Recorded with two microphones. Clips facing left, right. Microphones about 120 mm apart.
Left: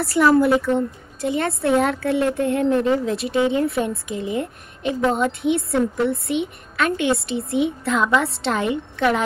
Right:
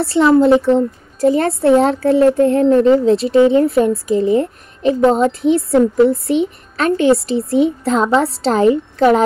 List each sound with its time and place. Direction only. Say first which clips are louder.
0.0 s a woman's voice: right 5 dB; 25° right (ahead or behind)